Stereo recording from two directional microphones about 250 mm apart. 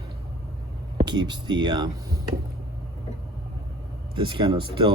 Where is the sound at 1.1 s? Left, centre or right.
Centre.